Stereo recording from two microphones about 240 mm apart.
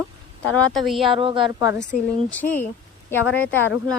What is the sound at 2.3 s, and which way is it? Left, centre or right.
Speech, centre.